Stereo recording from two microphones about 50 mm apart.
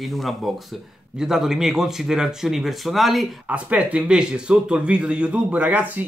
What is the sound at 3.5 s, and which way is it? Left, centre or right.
Speech, right.